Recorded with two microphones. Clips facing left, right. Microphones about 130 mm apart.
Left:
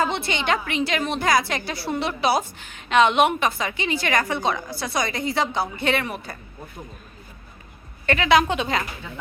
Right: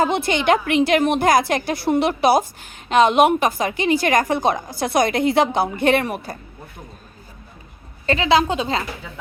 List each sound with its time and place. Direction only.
0.0 s a woman's voice: 45° right (ahead or behind)
8.0 s a woman's voice: 30° right (ahead or behind)